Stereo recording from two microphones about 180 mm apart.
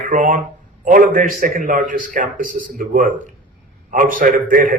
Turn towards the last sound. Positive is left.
turn(degrees=-50)  # may be behind; listen again after turning